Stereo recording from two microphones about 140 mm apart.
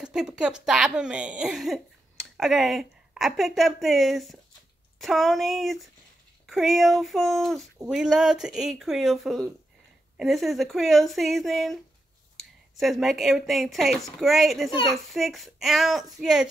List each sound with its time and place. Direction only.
0.0 s speech: 5° right (ahead or behind)